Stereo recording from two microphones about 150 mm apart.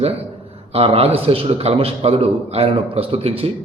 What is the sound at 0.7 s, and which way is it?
A man's voice, 40° right (ahead or behind).